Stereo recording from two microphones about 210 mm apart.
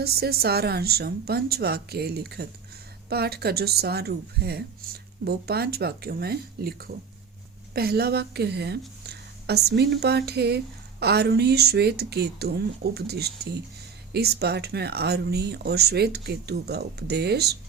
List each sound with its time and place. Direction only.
0.0 s speech: 50° right (ahead or behind)